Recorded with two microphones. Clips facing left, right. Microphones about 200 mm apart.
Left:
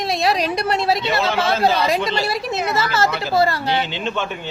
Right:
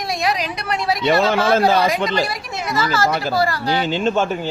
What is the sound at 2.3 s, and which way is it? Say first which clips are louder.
Speech: left 3 dB; 25° left (ahead or behind).